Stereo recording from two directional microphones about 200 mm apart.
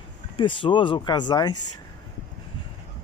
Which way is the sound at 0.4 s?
25° left (ahead or behind).